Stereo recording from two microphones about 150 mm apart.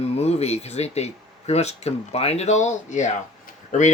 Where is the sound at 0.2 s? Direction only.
45° left (ahead or behind).